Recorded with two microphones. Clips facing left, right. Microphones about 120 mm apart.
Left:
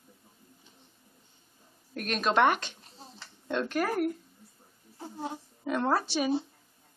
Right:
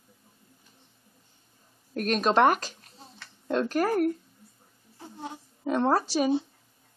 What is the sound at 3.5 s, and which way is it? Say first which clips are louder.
Speech: right 4 dB; 35° right (ahead or behind).